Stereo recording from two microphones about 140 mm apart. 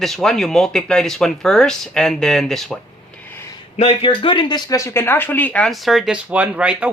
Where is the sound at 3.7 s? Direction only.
40° left (ahead or behind).